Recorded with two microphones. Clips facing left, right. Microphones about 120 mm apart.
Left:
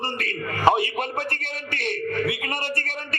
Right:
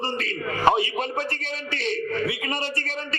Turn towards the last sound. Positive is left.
turn(degrees=55)  # may be behind; listen again after turning